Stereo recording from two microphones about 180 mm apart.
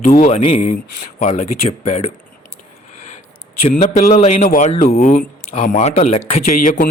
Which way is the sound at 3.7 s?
40° left (ahead or behind).